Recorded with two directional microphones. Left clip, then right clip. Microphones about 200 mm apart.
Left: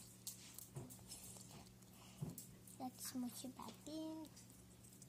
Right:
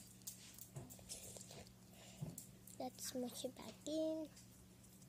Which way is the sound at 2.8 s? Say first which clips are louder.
Right 3 dB; 35° right (ahead or behind).